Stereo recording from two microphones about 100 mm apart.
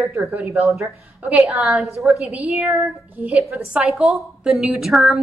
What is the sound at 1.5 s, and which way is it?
Speech, centre (ahead or behind).